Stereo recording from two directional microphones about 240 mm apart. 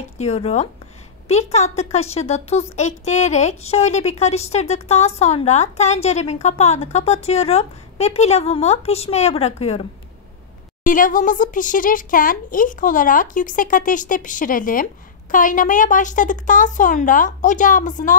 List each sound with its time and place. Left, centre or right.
0.2 s speech: left